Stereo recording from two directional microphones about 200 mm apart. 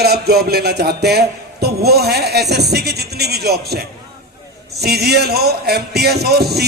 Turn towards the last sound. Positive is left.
turn(degrees=-55)  # may be behind; listen again after turning